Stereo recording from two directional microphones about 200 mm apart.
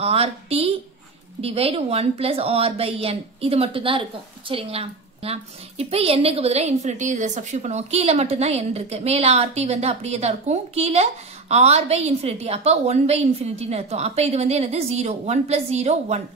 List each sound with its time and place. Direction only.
0.0 s a woman's voice: 30° right (ahead or behind)